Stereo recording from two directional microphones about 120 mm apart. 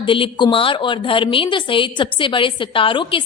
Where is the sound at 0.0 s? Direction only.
45° left (ahead or behind).